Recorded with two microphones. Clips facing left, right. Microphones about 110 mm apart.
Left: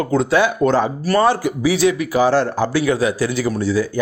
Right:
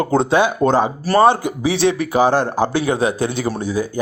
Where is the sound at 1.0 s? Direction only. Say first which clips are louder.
Right 2 dB; 30° right (ahead or behind).